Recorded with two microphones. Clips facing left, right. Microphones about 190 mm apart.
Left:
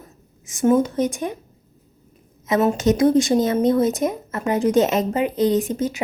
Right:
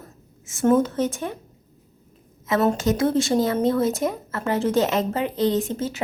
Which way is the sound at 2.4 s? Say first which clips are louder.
Left 3 dB; 15° left (ahead or behind).